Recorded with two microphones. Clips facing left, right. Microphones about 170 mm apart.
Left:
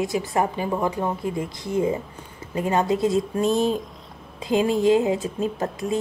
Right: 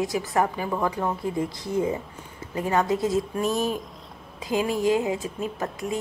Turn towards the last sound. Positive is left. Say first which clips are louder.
# left 4 dB
turn(degrees=25)  # may be behind; listen again after turning